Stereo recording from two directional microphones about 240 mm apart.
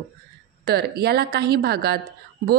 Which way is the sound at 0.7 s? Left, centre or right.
Right.